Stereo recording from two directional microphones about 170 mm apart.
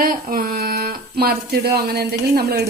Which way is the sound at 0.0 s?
55° right (ahead or behind).